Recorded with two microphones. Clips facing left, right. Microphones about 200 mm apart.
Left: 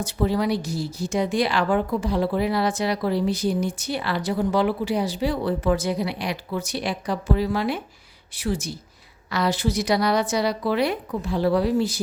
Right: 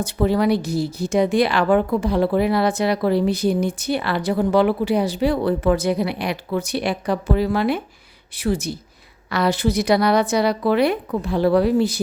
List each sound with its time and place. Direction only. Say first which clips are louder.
0.0 s a woman's voice: right 4 dB; 60° right (ahead or behind)